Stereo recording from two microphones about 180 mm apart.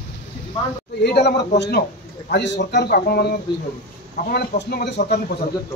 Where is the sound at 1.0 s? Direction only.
65° left (ahead or behind).